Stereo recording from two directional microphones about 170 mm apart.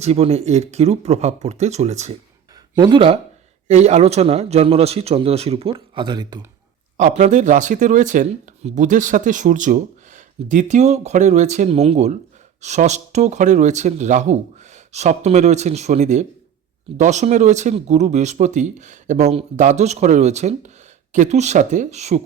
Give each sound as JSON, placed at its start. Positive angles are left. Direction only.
{"t": 0.0, "sound": "speech", "side_deg": -35}
{"t": 2.7, "sound": "speech", "side_deg": -25}
{"t": 3.7, "sound": "speech", "side_deg": -40}
{"t": 6.9, "sound": "speech", "side_deg": -45}